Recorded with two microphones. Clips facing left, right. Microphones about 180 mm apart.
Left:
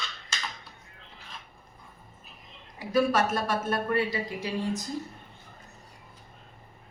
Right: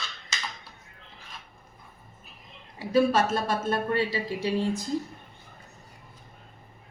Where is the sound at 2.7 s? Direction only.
30° right (ahead or behind).